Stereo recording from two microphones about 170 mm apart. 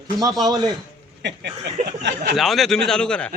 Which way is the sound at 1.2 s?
90° right.